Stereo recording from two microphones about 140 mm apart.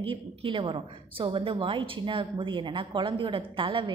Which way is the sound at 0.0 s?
40° right (ahead or behind).